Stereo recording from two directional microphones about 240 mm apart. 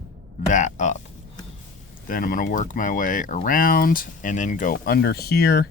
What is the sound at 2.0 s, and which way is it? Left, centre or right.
Speech, left.